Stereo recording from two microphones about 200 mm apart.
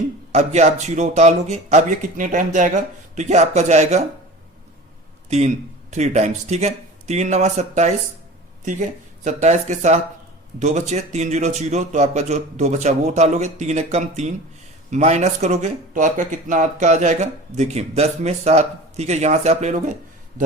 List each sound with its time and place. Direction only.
0.3 s speech: 35° right (ahead or behind)
5.9 s speech: 35° right (ahead or behind)